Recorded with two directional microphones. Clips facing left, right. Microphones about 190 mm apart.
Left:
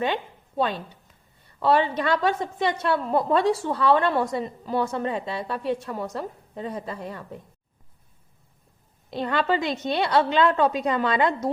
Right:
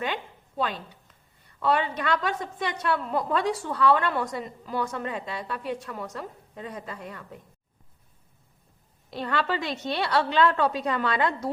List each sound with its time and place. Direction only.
0.0 s a sound: 25° left (ahead or behind)
1.5 s a woman's voice: 30° left (ahead or behind)
9.0 s a woman's voice: 20° left (ahead or behind)